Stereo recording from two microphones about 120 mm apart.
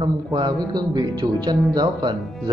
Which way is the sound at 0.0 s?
35° right (ahead or behind).